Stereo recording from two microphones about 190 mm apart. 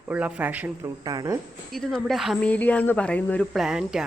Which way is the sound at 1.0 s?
20° right (ahead or behind).